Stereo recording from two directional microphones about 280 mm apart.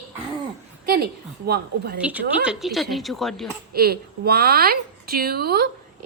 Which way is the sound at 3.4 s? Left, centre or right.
Right.